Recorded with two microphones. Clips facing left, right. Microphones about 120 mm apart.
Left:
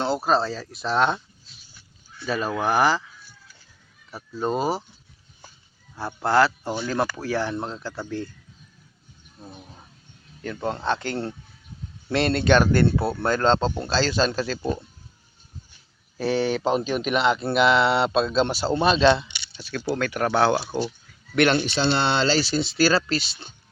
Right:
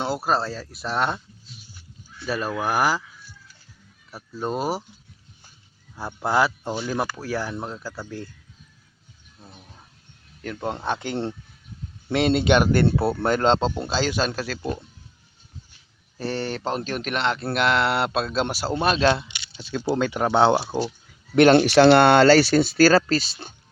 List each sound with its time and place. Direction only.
0.0 s speech: 5° right (ahead or behind)
2.2 s speech: 5° right (ahead or behind)
4.1 s speech: centre (ahead or behind)
6.2 s speech: 15° right (ahead or behind)
10.4 s speech: centre (ahead or behind)
10.7 s speech: 15° right (ahead or behind)
16.1 s speech: centre (ahead or behind)
19.6 s speech: 20° right (ahead or behind)
21.5 s speech: 65° right (ahead or behind); by 23.6 s 45° right (ahead or behind)